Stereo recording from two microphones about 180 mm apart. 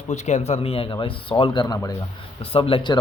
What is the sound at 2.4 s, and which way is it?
Speech, 30° left (ahead or behind).